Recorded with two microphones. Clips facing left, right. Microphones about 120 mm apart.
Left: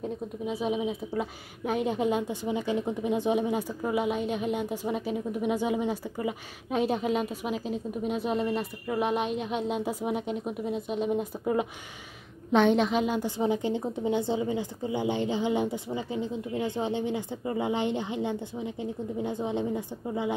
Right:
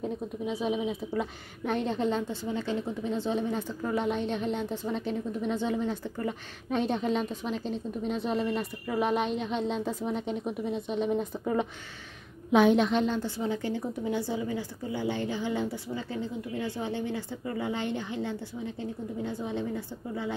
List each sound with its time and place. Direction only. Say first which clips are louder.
0.5 s a woman's voice: left 1 dB; centre (ahead or behind); by 20.3 s 15° left (ahead or behind)